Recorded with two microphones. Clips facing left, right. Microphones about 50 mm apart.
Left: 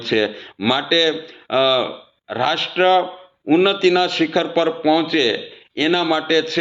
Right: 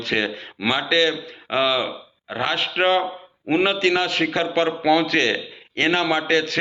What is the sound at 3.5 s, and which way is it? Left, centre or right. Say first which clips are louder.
A man's voice: left 5 dB; right.